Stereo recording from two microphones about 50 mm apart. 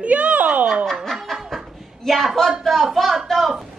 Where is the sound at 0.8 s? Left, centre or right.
Centre.